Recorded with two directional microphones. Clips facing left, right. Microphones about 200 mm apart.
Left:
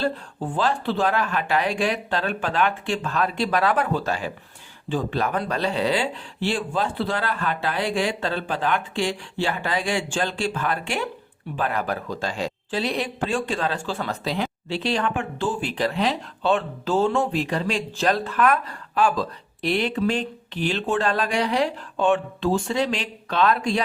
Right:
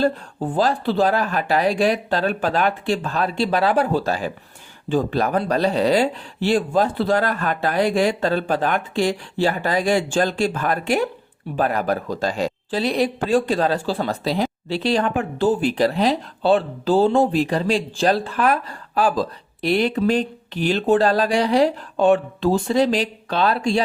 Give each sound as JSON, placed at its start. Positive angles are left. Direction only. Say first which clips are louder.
{"t": 0.0, "sound": "speech", "louder": "right 5 dB", "side_deg": -40}